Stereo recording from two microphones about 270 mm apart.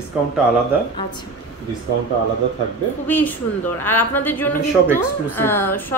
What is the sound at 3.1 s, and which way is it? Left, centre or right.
A woman's voice, centre.